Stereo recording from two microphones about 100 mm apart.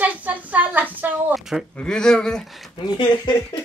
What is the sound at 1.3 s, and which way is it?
Speech, 5° right (ahead or behind).